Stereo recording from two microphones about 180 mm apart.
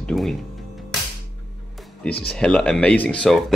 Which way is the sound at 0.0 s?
Centre (ahead or behind).